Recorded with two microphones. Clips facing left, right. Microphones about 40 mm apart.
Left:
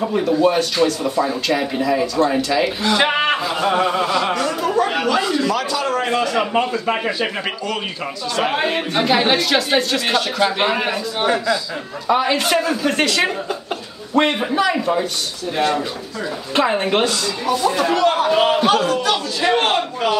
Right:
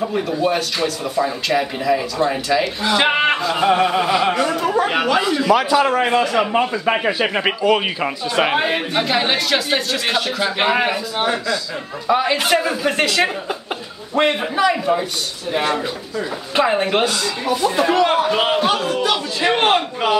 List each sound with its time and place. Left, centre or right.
0.4 s a man's voice: centre
6.9 s a man's voice: centre
8.5 s a man's voice: centre